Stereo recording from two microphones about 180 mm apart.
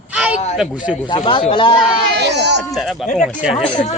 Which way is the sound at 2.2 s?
70° right (ahead or behind).